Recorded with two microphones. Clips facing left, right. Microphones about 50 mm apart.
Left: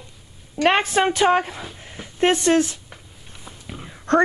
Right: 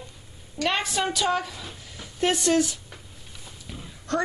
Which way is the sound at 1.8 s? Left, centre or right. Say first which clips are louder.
Left 6 dB; left.